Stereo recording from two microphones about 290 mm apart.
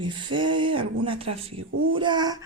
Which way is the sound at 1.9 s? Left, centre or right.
Centre.